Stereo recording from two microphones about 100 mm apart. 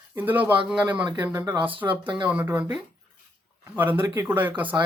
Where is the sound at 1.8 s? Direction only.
55° right (ahead or behind).